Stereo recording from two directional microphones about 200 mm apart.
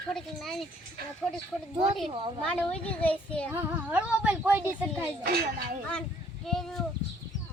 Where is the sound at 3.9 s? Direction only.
5° right (ahead or behind).